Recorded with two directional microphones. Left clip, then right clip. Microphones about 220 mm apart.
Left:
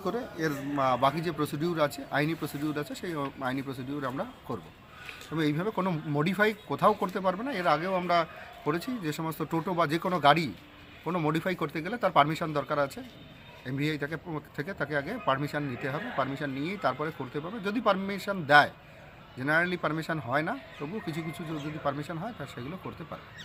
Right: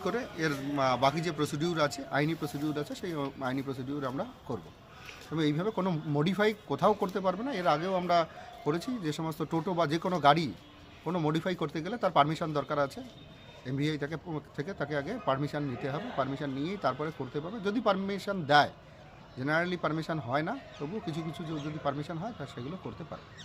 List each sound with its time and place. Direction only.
0.0 s speech: 5° right (ahead or behind)
5.3 s a man's voice: 5° right (ahead or behind)
21.0 s speech: 30° right (ahead or behind)
21.8 s a man's voice: centre (ahead or behind)